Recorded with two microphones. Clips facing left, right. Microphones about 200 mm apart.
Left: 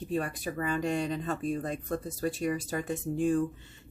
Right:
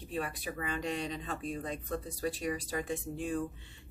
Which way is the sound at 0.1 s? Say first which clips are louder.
Left 5 dB; 45° left (ahead or behind).